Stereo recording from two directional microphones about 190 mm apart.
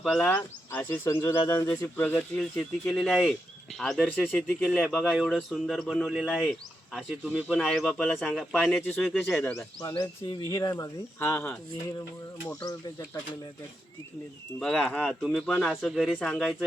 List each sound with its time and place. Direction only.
0.0 s speech: 5° left (ahead or behind)
9.9 s speech: 25° left (ahead or behind)
14.6 s speech: 5° left (ahead or behind)